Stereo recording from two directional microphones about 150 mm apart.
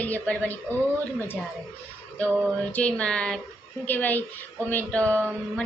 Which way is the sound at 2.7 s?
10° left (ahead or behind).